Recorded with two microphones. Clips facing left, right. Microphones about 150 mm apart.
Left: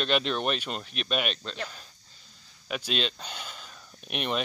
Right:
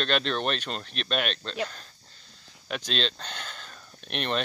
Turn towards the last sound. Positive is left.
turn(degrees=5)  # may be behind; listen again after turning